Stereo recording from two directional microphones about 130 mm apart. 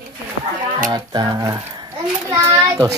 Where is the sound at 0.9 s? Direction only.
35° right (ahead or behind).